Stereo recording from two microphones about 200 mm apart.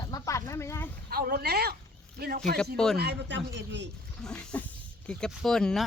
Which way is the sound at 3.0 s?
60° right (ahead or behind).